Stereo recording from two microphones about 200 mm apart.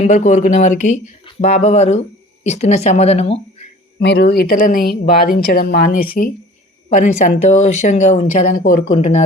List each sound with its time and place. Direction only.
0.0 s speech: 35° left (ahead or behind)
4.0 s speech: 60° left (ahead or behind)
8.9 s speech: 35° left (ahead or behind)